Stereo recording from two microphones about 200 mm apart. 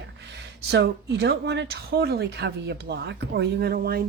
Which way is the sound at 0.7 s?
60° right (ahead or behind).